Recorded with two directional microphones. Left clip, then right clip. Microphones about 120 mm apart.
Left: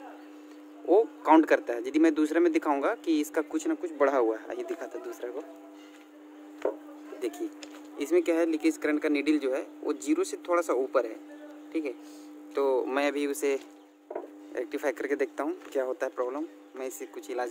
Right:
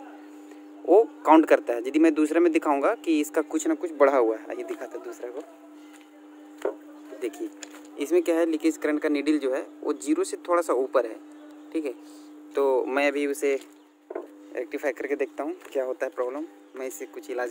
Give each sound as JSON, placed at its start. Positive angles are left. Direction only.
{"t": 0.8, "sound": "speech", "side_deg": -30}
{"t": 4.0, "sound": "speech", "side_deg": -20}
{"t": 4.3, "sound": "speech", "side_deg": -5}
{"t": 7.2, "sound": "speech", "side_deg": -20}
{"t": 14.5, "sound": "speech", "side_deg": -5}
{"t": 15.8, "sound": "speech", "side_deg": -10}
{"t": 16.7, "sound": "speech", "side_deg": -20}